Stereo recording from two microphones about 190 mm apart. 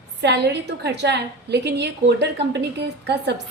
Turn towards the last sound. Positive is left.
turn(degrees=-65)  # may be behind; listen again after turning